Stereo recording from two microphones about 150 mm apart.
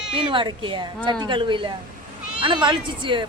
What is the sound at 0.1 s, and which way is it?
Speech, 35° right (ahead or behind).